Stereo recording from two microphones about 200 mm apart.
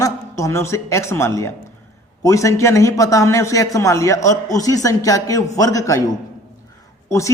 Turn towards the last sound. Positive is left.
turn(degrees=15)  # may be behind; listen again after turning